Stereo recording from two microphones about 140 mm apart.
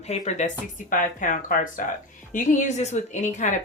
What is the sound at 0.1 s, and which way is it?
Speech, 55° left (ahead or behind).